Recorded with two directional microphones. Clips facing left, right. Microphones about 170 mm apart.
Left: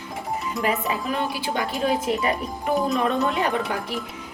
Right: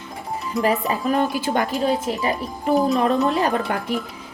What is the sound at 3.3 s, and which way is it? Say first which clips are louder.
Speech: right 3 dB; 40° right (ahead or behind).